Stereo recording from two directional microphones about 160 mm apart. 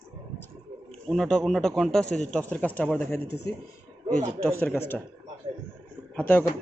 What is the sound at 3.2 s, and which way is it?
Speech, 90° left.